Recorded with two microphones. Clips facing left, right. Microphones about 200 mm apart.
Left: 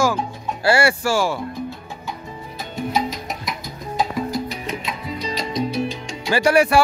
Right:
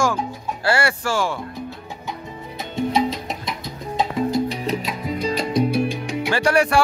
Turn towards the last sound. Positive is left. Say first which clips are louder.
# left 2 dB
turn(degrees=5)  # may be behind; listen again after turning